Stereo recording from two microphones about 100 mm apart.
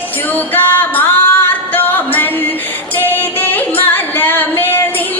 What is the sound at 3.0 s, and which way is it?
Singing, 20° left (ahead or behind).